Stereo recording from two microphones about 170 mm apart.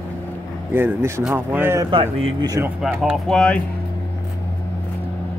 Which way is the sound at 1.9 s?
25° right (ahead or behind).